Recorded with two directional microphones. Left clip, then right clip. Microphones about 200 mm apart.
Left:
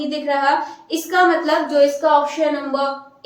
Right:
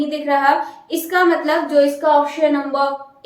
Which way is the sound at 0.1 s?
15° right (ahead or behind).